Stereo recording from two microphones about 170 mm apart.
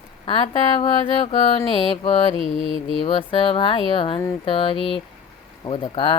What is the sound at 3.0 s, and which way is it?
Mantra, 30° left (ahead or behind).